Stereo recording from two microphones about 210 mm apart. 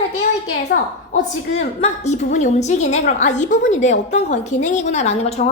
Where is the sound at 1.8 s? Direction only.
35° left (ahead or behind).